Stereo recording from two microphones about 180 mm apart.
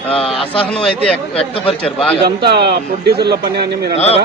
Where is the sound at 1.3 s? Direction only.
30° left (ahead or behind).